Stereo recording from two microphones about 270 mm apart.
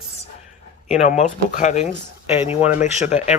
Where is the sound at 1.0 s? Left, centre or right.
Left.